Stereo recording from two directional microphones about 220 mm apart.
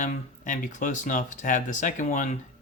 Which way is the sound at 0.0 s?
35° left (ahead or behind).